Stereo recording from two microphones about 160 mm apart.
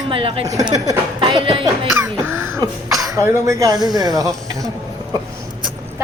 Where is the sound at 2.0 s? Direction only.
15° right (ahead or behind).